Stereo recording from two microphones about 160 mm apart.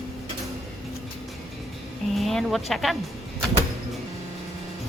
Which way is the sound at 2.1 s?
Centre (ahead or behind).